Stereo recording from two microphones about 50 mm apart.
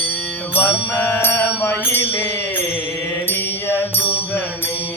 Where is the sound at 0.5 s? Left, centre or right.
Left.